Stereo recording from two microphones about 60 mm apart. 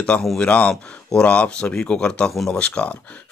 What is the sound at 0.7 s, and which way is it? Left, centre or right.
Speech, centre.